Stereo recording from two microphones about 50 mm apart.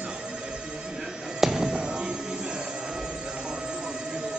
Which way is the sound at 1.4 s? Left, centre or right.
Centre.